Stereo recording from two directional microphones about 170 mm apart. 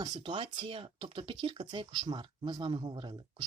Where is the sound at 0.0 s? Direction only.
25° right (ahead or behind).